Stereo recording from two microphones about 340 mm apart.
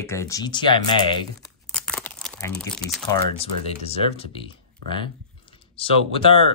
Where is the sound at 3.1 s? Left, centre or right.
Centre.